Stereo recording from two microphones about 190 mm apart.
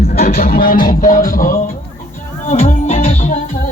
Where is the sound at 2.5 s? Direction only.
35° left (ahead or behind).